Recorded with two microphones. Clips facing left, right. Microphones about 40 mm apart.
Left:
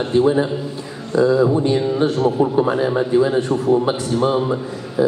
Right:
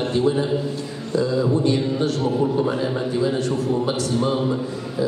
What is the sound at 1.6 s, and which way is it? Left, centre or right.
A woman's voice, left.